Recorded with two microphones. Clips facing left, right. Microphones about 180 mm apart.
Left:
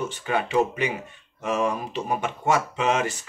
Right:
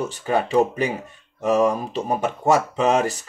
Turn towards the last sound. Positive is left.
turn(degrees=-35)  # may be behind; listen again after turning